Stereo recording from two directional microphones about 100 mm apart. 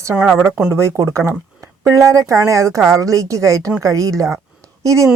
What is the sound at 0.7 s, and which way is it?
Speech, 30° right (ahead or behind).